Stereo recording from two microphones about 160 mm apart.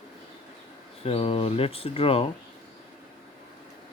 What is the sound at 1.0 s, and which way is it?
Speech, 35° left (ahead or behind).